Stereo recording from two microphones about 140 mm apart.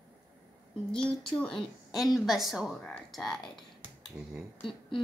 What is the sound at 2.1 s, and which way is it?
Speech, centre (ahead or behind).